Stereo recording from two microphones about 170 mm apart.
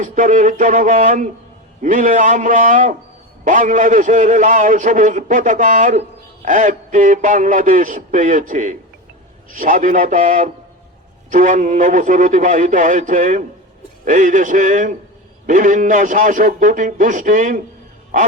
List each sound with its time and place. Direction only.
0.0 s a man's voice: 50° right (ahead or behind)